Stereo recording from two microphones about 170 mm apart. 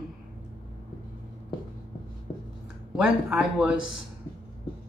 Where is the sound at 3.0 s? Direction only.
5° right (ahead or behind).